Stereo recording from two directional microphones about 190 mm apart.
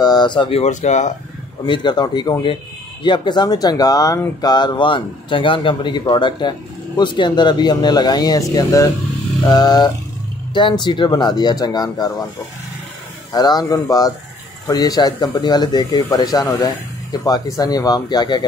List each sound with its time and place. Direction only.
0.0 s speech: 20° left (ahead or behind); by 1.1 s 40° left (ahead or behind)
1.7 s speech: 25° left (ahead or behind)
13.3 s speech: 20° left (ahead or behind)